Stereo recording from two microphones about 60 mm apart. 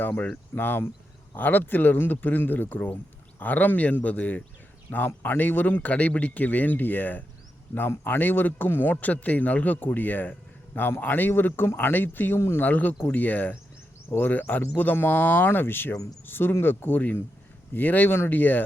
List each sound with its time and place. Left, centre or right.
0.0 s a man's voice: left